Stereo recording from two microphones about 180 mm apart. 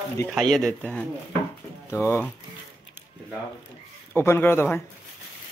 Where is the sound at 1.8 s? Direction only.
15° left (ahead or behind).